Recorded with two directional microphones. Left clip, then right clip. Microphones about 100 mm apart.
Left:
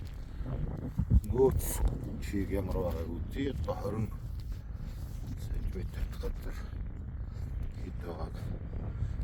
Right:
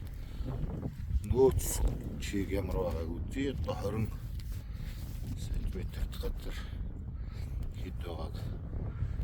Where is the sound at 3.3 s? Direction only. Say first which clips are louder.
Right 1 dB; 15° left (ahead or behind).